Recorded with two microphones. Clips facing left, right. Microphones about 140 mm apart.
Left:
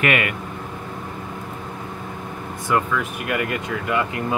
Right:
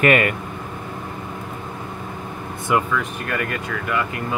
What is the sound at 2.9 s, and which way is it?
Speech, 10° left (ahead or behind).